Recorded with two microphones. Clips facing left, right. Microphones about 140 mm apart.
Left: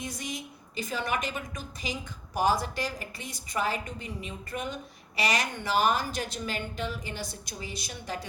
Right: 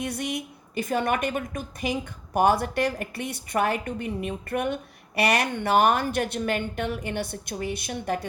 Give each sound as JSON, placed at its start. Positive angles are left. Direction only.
{"t": 0.0, "sound": "a woman's voice", "side_deg": -65}